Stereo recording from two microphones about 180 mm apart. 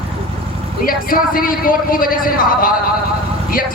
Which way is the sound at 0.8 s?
50° left (ahead or behind).